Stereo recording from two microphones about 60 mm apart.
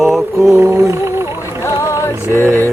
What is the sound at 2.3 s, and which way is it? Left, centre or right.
Music, left.